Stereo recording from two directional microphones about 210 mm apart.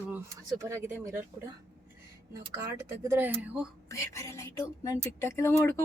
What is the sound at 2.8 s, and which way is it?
Speech, 10° right (ahead or behind).